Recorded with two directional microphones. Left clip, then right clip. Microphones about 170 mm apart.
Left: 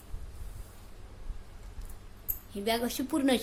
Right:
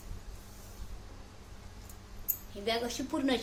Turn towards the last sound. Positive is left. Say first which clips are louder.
# left 3 dB
turn(degrees=70)  # may be behind; listen again after turning